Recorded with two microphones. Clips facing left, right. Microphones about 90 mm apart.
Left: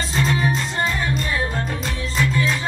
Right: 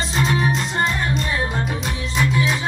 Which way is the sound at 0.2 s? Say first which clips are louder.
Right 1 dB; 15° right (ahead or behind).